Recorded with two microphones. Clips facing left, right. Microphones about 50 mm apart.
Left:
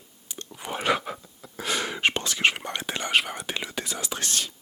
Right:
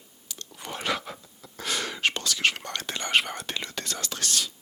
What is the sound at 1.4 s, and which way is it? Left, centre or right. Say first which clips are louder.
Speech: left 2 dB; centre.